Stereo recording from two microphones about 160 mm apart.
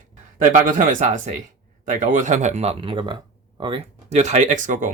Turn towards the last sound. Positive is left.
turn(degrees=-55)  # may be behind; listen again after turning